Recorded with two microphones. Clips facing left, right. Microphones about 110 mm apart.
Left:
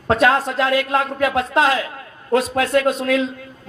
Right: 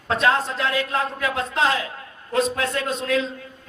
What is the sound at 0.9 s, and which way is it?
Speech, 30° left (ahead or behind).